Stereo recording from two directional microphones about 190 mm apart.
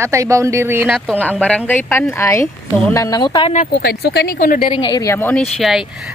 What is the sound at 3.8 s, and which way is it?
Speech, 55° left (ahead or behind).